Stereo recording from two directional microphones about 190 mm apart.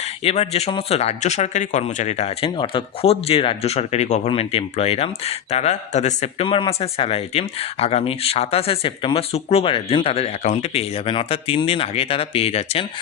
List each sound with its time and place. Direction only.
0.0 s speech: 35° left (ahead or behind)